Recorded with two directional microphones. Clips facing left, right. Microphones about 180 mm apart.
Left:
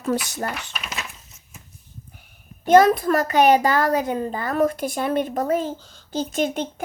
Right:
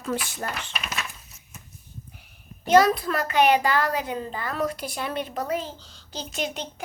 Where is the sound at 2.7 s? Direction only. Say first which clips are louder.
Left 4 dB; 50° left (ahead or behind).